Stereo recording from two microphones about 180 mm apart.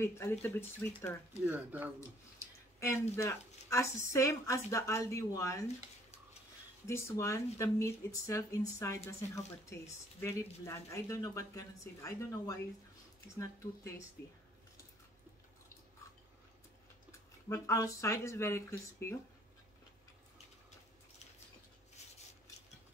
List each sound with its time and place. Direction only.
0.0 s speech: 15° left (ahead or behind)
1.4 s speech: 10° right (ahead or behind)
2.0 s speech: 15° left (ahead or behind)
6.9 s speech: 15° left (ahead or behind)
17.5 s speech: 15° left (ahead or behind)